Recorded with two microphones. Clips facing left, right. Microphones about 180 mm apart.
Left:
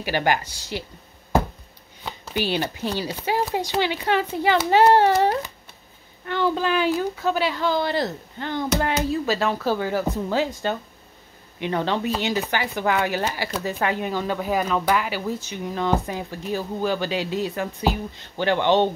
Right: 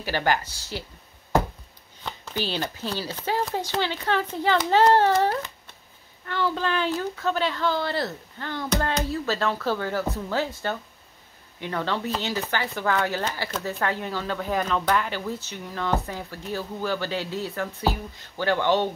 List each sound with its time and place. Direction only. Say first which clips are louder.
0.0 s speech: left 2 dB; 15° left (ahead or behind)
2.0 s speech: left 4 dB; 10° left (ahead or behind)